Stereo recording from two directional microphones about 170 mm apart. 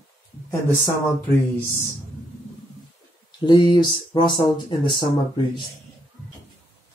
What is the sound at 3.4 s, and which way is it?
Speech, 25° left (ahead or behind).